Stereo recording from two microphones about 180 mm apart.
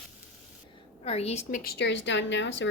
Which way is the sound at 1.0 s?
35° left (ahead or behind).